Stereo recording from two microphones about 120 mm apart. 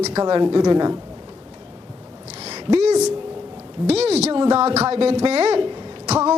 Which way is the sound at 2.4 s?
60° right (ahead or behind).